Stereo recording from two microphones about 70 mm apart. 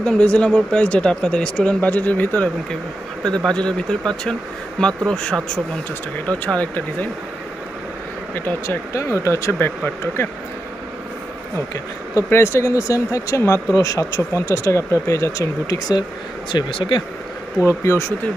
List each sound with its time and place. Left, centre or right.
0.0 s speech: centre
3.3 s speech: centre
8.6 s speech: left
9.6 s speech: left
12.3 s speech: left
16.5 s speech: left
17.6 s speech: left